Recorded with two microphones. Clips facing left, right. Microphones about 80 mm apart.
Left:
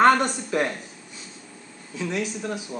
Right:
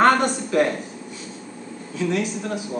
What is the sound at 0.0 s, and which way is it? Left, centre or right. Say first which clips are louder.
Speech: right 1 dB; centre.